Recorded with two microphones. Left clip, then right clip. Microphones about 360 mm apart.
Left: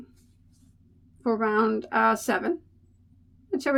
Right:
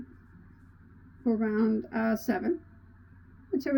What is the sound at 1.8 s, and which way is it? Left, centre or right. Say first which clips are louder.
Speech: left 9 dB; centre.